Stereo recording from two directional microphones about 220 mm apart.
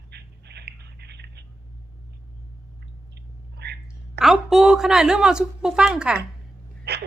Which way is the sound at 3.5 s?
50° right (ahead or behind).